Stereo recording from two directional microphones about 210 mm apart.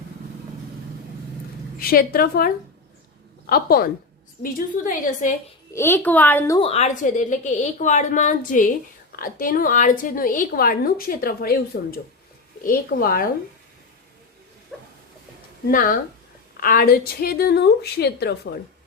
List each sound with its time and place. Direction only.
1.8 s a woman's voice: 45° left (ahead or behind)
5.7 s a child's voice: 10° left (ahead or behind)
6.6 s a woman's voice: 30° left (ahead or behind)
14.7 s a sound: centre (ahead or behind)
15.6 s a woman's voice: 40° left (ahead or behind)